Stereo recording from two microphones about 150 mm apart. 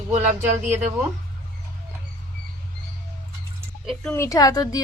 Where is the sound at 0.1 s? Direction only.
50° right (ahead or behind).